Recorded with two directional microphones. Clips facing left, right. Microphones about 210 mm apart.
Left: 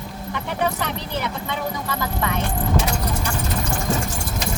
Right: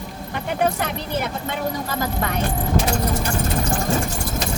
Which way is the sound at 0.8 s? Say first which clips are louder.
Right 2 dB; 50° right (ahead or behind).